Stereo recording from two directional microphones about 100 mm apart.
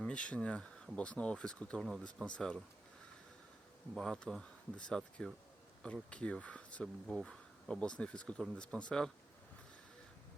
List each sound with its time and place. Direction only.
0.0 s speech: 10° left (ahead or behind)
3.9 s speech: 5° left (ahead or behind)